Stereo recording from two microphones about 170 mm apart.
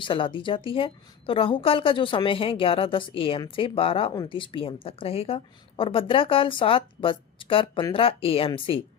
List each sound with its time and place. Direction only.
0.0 s a woman's voice: 30° left (ahead or behind)